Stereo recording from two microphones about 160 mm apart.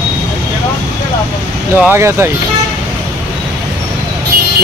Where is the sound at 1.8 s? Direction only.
15° right (ahead or behind).